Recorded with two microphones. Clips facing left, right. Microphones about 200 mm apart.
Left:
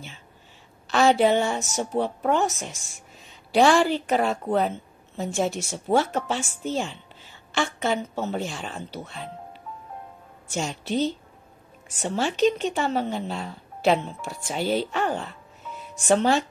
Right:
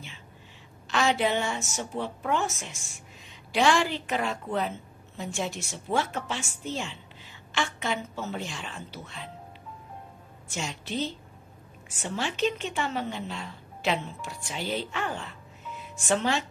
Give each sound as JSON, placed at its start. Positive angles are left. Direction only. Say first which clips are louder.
{"t": 0.8, "sound": "a woman's voice", "louder": "left 7 dB", "side_deg": 40}
{"t": 10.5, "sound": "a woman's voice", "louder": "left 6 dB", "side_deg": 40}